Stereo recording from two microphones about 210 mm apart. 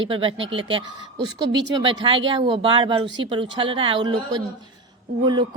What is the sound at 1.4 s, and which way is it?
Speech, 55° right (ahead or behind).